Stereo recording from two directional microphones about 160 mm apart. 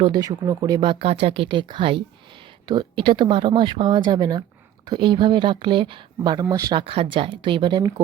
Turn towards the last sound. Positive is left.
turn(degrees=-30)  # may be behind; listen again after turning